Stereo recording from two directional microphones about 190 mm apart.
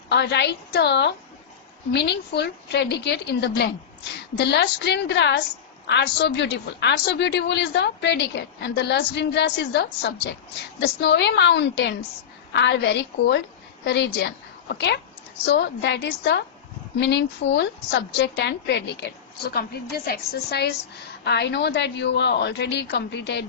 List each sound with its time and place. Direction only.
0.1 s a woman's voice: 65° left (ahead or behind)